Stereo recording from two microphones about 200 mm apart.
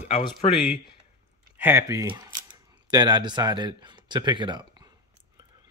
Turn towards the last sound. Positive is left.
turn(degrees=-25)  # may be behind; listen again after turning